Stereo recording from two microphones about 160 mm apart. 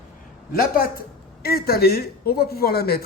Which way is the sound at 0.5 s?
65° left (ahead or behind).